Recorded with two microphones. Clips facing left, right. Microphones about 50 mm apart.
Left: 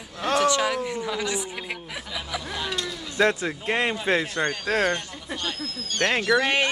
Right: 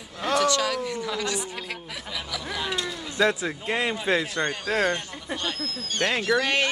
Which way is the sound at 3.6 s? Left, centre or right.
Left.